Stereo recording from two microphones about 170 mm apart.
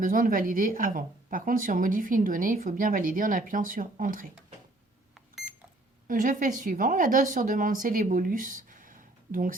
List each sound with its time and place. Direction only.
0.0 s a woman's voice: 55° right (ahead or behind)
6.1 s a woman's voice: 50° right (ahead or behind)